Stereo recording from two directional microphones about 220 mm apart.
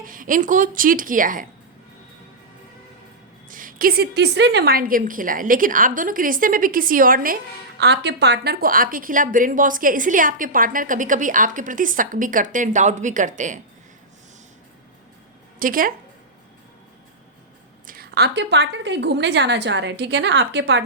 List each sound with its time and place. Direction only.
0.0 s a woman's voice: 40° right (ahead or behind)
3.5 s a woman's voice: 40° right (ahead or behind)
7.8 s a woman's voice: 50° right (ahead or behind); by 13.6 s 35° right (ahead or behind)
15.5 s a woman's voice: 40° right (ahead or behind)
17.8 s a woman's voice: 45° right (ahead or behind)